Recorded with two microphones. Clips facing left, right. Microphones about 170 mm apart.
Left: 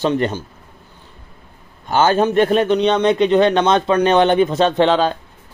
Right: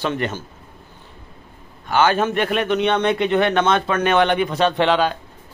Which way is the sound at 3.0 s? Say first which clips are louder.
Left 5 dB; 20° left (ahead or behind).